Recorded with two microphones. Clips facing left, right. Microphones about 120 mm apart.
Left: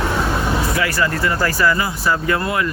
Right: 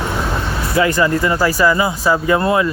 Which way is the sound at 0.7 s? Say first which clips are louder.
Right 5 dB; 25° right (ahead or behind).